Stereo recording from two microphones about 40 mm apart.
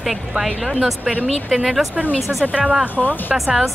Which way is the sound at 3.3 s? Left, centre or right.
Right.